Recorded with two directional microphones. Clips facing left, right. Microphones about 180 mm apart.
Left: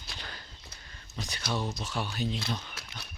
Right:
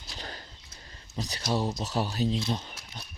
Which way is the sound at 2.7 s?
70° left (ahead or behind).